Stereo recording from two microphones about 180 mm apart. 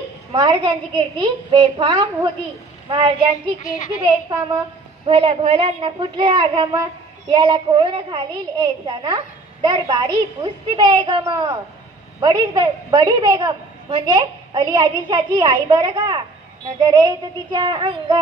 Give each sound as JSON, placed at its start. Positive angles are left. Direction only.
{"t": 0.3, "sound": "a woman's voice", "side_deg": -30}